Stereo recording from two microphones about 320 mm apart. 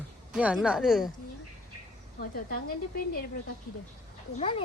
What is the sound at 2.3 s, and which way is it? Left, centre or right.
Speech, left.